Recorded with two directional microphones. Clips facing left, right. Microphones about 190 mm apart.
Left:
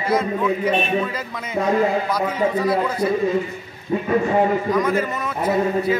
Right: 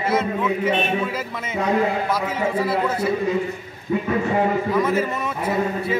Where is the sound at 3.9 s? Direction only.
40° left (ahead or behind).